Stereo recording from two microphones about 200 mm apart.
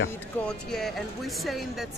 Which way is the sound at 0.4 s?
Centre (ahead or behind).